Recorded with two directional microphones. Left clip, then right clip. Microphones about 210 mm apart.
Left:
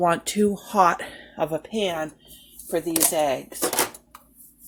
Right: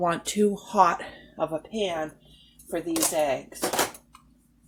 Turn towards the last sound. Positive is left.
turn(degrees=40)  # may be behind; listen again after turning